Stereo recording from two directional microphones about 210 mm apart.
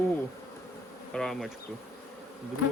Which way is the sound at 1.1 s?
Centre (ahead or behind).